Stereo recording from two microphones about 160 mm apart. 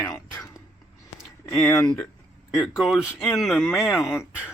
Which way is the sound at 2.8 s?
Centre (ahead or behind).